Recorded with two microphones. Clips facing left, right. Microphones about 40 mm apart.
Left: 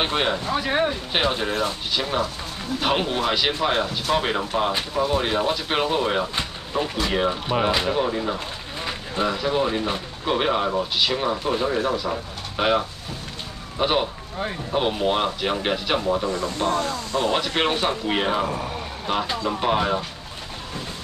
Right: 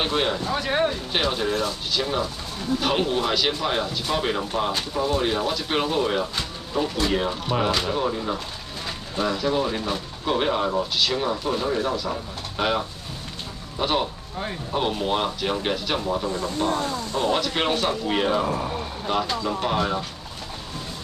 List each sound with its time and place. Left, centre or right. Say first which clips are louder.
0.0 s speech: left 1 dB; centre
16.6 s speech: left 2 dB; left
17.2 s speech: left 1 dB; centre